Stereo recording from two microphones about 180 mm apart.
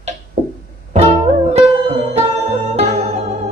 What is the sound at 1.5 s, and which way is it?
Music, 35° right (ahead or behind).